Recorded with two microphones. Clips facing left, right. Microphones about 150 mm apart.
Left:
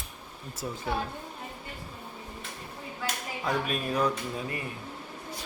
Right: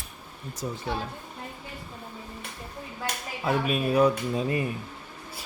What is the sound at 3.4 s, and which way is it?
Speech, 5° right (ahead or behind).